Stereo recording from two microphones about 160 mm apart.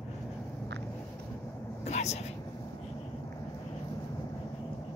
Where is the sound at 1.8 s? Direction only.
45° left (ahead or behind).